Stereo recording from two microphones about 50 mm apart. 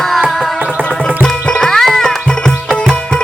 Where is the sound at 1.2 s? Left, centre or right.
Centre.